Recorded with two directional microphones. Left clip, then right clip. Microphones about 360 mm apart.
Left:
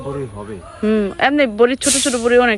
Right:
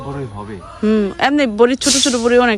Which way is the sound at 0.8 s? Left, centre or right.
Centre.